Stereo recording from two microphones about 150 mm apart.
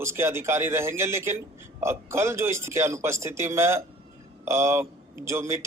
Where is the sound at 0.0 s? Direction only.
15° right (ahead or behind).